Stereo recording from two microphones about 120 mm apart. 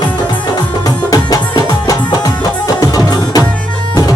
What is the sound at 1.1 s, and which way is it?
Music, 30° left (ahead or behind).